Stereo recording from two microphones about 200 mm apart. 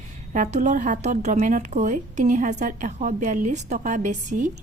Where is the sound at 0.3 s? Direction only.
35° right (ahead or behind).